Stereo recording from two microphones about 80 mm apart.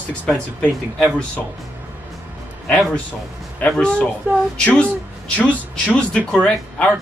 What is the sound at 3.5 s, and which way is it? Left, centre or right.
Speech, centre.